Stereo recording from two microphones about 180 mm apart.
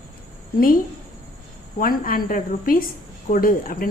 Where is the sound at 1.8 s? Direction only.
50° left (ahead or behind).